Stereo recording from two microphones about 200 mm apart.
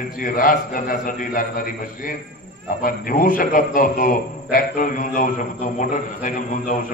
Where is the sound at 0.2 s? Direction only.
45° left (ahead or behind).